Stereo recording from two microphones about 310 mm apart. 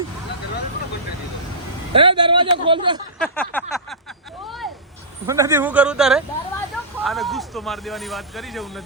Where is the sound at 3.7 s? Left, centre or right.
Centre.